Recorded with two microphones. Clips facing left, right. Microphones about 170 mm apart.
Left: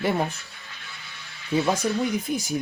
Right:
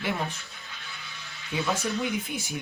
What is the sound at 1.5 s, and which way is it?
Speech, 40° left (ahead or behind).